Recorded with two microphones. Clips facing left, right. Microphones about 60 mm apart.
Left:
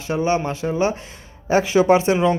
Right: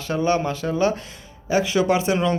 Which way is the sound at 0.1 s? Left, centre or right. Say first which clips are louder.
Left 1 dB; left.